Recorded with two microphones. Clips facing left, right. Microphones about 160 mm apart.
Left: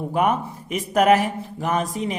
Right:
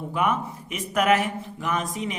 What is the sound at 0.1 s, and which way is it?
Speech, 40° left (ahead or behind).